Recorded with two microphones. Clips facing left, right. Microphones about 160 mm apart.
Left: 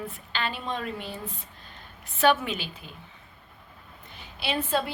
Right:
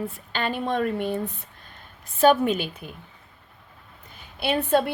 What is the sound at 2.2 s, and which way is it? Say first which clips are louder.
Speech: right 5 dB; 40° right (ahead or behind).